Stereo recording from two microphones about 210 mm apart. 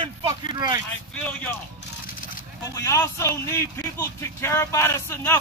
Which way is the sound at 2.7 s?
15° left (ahead or behind).